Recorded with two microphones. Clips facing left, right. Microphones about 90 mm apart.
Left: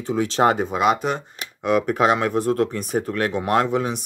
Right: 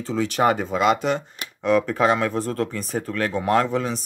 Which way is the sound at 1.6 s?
20° left (ahead or behind).